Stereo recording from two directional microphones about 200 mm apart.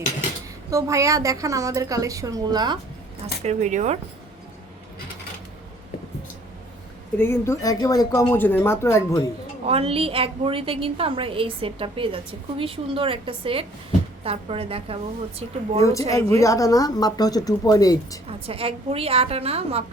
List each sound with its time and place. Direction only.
0.7 s a woman's voice: 15° right (ahead or behind)
3.4 s speech: 35° right (ahead or behind)
7.2 s speech: 15° left (ahead or behind)
9.6 s a woman's voice: 30° right (ahead or behind)
15.8 s speech: 15° left (ahead or behind)
18.3 s a woman's voice: 30° right (ahead or behind)